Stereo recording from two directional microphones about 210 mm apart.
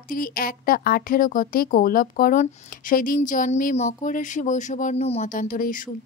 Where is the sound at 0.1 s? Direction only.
40° left (ahead or behind).